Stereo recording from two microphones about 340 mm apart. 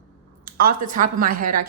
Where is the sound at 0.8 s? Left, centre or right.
Right.